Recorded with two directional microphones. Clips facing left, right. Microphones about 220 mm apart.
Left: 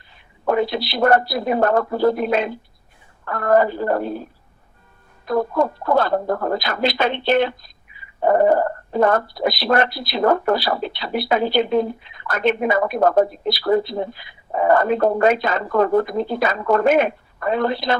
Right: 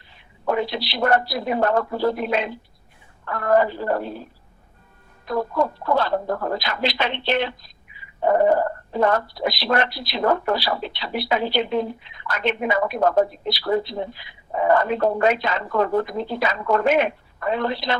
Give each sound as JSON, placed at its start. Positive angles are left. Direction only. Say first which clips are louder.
{"t": 0.4, "sound": "speech", "louder": "left 4 dB", "side_deg": 50}